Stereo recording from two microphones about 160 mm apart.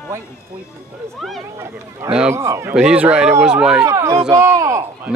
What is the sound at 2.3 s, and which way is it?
A man's voice, 15° right (ahead or behind).